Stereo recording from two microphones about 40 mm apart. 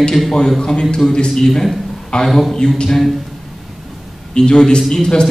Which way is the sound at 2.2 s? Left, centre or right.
Centre.